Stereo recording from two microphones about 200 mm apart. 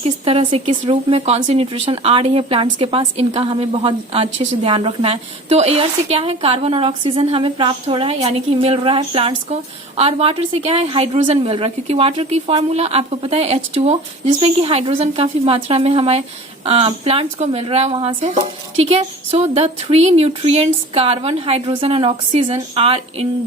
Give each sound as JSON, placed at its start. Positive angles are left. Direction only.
{"t": 0.0, "sound": "speech", "side_deg": -30}